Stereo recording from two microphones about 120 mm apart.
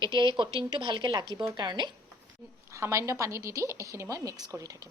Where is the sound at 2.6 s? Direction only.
25° right (ahead or behind).